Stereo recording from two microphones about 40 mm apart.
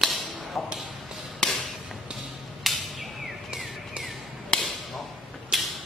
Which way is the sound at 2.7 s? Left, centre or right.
Centre.